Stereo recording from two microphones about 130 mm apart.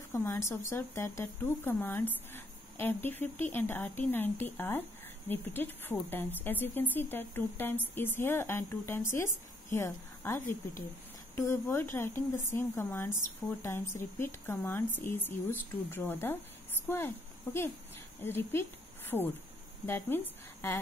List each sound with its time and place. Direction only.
0.1 s a woman's voice: 20° left (ahead or behind)